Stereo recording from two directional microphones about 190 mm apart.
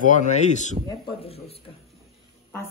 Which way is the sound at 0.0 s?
40° left (ahead or behind).